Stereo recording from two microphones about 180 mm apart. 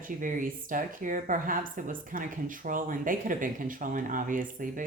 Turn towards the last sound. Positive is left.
turn(degrees=-50)  # may be behind; listen again after turning